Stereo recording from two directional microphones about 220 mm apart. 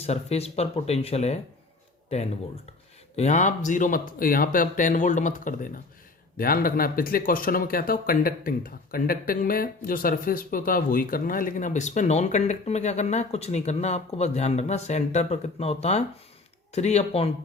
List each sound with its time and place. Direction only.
0.0 s speech: 30° left (ahead or behind)